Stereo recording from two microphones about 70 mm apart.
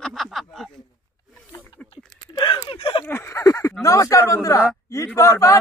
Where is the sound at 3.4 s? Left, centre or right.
Left.